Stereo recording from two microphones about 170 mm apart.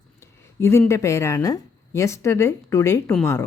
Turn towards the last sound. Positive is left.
turn(degrees=15)  # may be behind; listen again after turning